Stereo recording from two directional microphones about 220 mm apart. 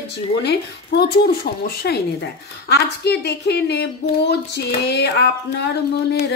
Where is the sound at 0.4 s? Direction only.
45° left (ahead or behind).